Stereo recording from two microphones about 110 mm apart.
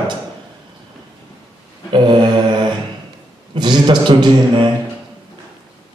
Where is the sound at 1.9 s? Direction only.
45° right (ahead or behind).